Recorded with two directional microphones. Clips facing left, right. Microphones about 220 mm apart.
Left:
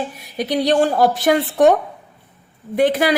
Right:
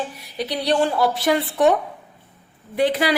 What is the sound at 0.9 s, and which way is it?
Speech, 45° left (ahead or behind).